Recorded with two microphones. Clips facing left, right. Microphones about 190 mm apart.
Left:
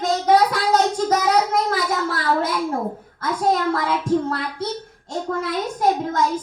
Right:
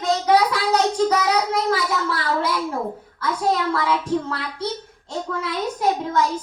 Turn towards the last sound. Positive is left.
turn(degrees=45)  # may be behind; listen again after turning